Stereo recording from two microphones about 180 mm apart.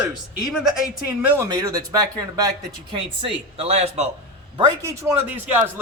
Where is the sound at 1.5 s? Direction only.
20° right (ahead or behind); by 4.0 s 35° right (ahead or behind).